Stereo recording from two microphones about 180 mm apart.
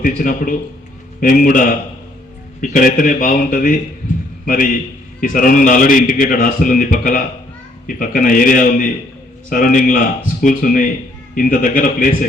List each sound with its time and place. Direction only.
0.0 s a man's voice: 50° left (ahead or behind)